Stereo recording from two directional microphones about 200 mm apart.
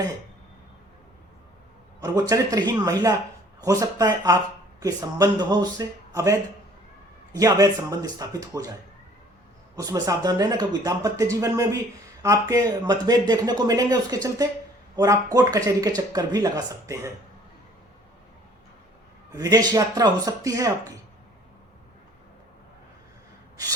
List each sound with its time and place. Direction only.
2.0 s speech: 20° right (ahead or behind)
9.7 s speech: 15° right (ahead or behind)
19.3 s speech: 15° right (ahead or behind)